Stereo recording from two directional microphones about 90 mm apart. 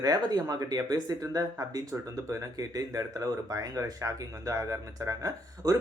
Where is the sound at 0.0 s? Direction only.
45° right (ahead or behind).